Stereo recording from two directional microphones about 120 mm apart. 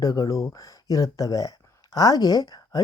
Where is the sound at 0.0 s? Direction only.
30° left (ahead or behind).